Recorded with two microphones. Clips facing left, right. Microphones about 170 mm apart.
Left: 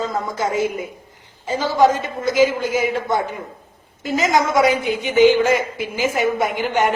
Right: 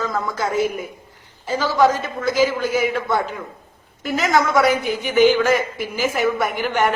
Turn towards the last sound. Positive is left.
turn(degrees=15)  # may be behind; listen again after turning